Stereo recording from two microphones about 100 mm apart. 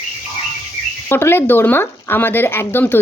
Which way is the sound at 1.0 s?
25° left (ahead or behind).